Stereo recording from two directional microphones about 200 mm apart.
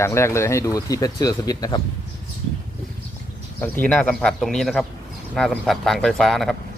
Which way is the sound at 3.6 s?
5° left (ahead or behind).